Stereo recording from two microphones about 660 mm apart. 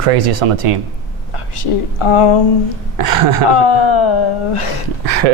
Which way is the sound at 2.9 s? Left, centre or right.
Right.